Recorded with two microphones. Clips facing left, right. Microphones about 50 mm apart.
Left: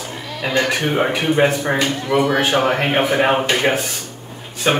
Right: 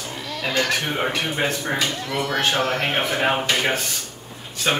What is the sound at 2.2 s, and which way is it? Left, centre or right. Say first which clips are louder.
Speech: left 5 dB; centre.